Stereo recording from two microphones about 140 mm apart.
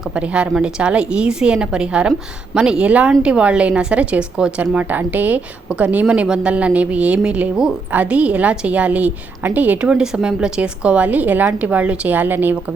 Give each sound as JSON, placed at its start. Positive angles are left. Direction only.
{"t": 0.2, "sound": "speech", "side_deg": -5}